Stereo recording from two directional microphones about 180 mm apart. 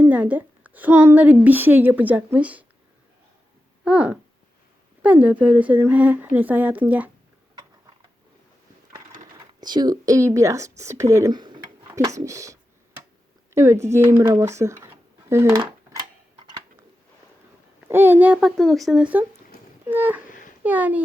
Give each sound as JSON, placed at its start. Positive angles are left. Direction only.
{"t": 0.0, "sound": "a woman's voice", "side_deg": -10}
{"t": 3.8, "sound": "a woman's voice", "side_deg": -5}
{"t": 9.6, "sound": "a woman's voice", "side_deg": -25}
{"t": 15.3, "sound": "dishes", "side_deg": -15}
{"t": 17.8, "sound": "a woman's voice", "side_deg": -10}
{"t": 20.2, "sound": "a sound", "side_deg": 50}
{"t": 20.7, "sound": "a woman's voice", "side_deg": -10}